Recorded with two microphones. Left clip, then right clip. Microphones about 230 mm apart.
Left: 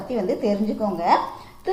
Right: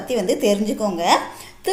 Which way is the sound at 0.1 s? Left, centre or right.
Right.